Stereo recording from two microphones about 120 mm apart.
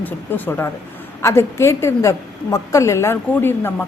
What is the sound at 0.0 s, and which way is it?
A woman's voice, 15° left (ahead or behind).